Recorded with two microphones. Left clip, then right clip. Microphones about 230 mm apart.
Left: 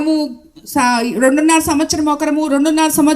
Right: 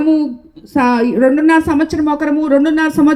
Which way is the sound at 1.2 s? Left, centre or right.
Left.